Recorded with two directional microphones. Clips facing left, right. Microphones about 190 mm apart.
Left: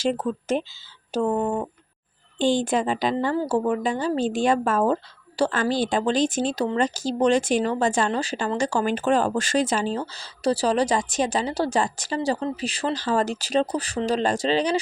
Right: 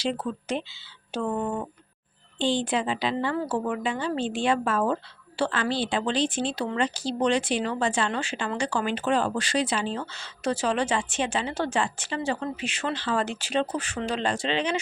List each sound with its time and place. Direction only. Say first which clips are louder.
0.0 s a woman's voice: left 4 dB; 45° left (ahead or behind)
2.4 s a woman's voice: left 4 dB; 45° left (ahead or behind)